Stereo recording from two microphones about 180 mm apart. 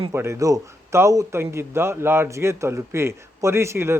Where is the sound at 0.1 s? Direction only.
15° right (ahead or behind).